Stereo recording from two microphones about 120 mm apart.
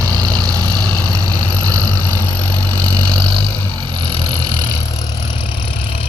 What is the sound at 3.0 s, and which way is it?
Vehicle, 45° right (ahead or behind).